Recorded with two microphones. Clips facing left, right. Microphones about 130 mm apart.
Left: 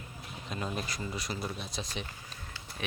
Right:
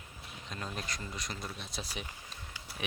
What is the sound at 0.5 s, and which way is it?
Speech, 5° left (ahead or behind).